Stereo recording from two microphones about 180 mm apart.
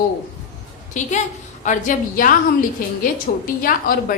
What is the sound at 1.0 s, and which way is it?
A woman's voice, 45° left (ahead or behind).